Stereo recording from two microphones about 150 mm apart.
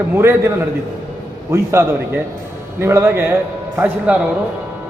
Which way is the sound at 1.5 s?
20° right (ahead or behind).